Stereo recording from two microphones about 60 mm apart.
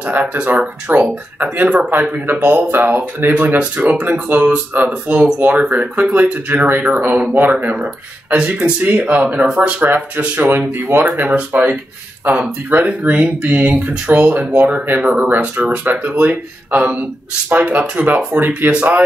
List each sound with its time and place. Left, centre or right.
0.0 s speech: right
7.7 s speech: centre